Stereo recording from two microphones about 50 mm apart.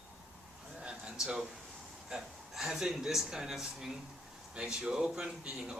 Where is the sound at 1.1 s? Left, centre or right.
Centre.